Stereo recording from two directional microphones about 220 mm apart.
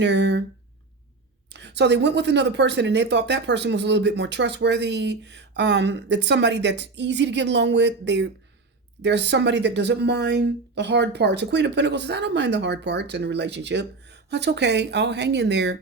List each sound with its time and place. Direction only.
0.0 s speech: 55° right (ahead or behind)
1.5 s speech: 50° right (ahead or behind)